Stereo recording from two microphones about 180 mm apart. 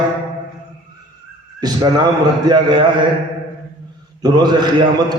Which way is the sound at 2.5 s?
25° right (ahead or behind).